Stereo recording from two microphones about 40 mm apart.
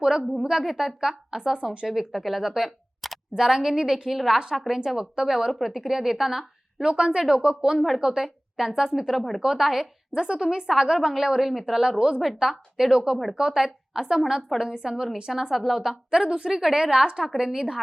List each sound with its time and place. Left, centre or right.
0.6 s a woman's voice: centre
2.1 s speech: centre
2.6 s a sound: centre
3.3 s a woman's voice: centre
5.5 s speech: centre
5.7 s a woman's voice: centre
6.8 s speech: right
7.8 s a woman's voice: centre
9.1 s speech: centre
9.4 s a woman's voice: centre
10.2 s a woman's voice: centre
16.2 s speech: right
16.5 s a woman's voice: centre